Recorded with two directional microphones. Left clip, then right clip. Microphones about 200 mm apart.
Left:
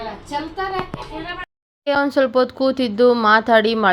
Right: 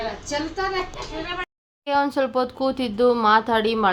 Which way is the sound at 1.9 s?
15° left (ahead or behind).